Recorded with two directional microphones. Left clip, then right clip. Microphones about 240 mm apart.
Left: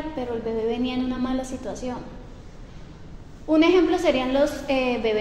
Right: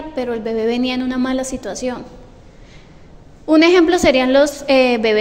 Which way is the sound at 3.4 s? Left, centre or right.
Right.